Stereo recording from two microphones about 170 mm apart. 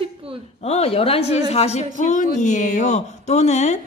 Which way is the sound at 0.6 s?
40° left (ahead or behind).